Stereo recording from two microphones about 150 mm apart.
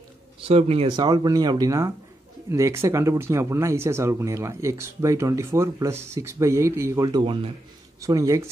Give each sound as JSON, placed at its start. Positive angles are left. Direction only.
{"t": 0.4, "sound": "speech", "side_deg": -40}
{"t": 0.9, "sound": "speech", "side_deg": -30}
{"t": 8.0, "sound": "speech", "side_deg": -20}